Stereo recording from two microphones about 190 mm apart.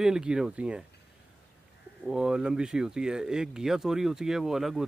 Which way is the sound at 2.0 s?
5° right (ahead or behind).